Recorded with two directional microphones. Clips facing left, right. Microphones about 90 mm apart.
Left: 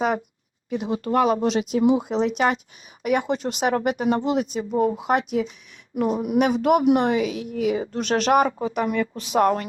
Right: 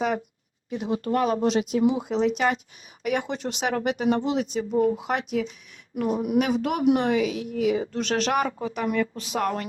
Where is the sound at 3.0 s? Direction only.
50° left (ahead or behind).